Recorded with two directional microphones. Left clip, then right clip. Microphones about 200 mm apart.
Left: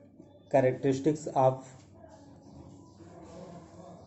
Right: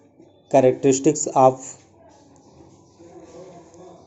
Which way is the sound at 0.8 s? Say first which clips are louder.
Right 10 dB; 25° right (ahead or behind).